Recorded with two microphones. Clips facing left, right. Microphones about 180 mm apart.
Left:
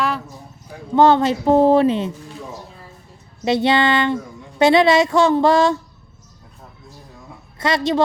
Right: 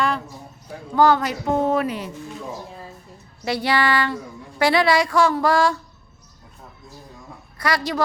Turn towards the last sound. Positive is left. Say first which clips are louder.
# left 5 dB
turn(degrees=25)  # may be behind; listen again after turning